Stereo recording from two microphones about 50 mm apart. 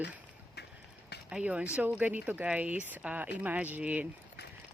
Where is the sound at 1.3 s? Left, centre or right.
Right.